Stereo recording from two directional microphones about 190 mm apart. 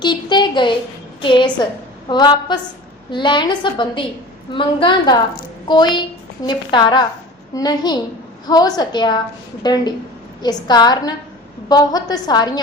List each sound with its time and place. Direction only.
0.0 s a woman's voice: 25° left (ahead or behind)